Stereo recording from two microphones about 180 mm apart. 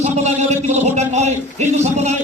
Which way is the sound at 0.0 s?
40° right (ahead or behind).